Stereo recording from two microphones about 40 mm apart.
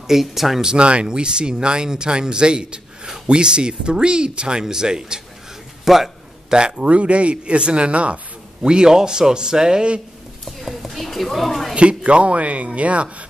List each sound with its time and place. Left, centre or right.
0.0 s a man's voice: centre
0.7 s speech: right
5.9 s speech: centre
6.5 s speech: right
6.9 s speech: right
8.6 s a man's voice: centre
10.4 s speech: centre
11.7 s speech: right